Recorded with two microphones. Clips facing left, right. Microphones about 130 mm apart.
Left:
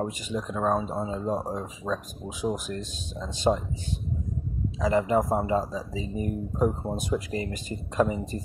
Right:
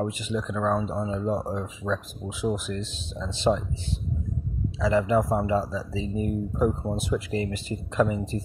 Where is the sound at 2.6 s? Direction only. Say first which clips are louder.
Right 2 dB; 45° left (ahead or behind).